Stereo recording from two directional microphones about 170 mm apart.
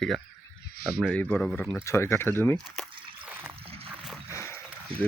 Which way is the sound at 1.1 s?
5° left (ahead or behind).